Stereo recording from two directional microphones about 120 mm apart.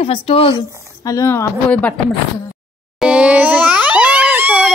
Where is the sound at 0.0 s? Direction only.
50° left (ahead or behind).